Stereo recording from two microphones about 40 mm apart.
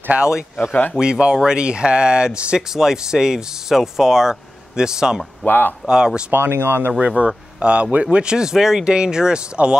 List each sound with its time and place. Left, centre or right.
0.1 s speech: right
0.9 s speech: centre
2.7 s speech: centre
5.4 s speech: left
5.9 s speech: centre
6.3 s speech: right
7.1 s speech: right